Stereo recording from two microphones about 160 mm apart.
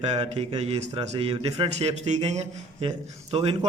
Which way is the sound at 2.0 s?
45° right (ahead or behind).